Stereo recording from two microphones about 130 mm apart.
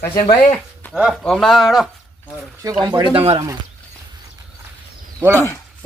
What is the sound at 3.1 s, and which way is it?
Speech, 50° right (ahead or behind).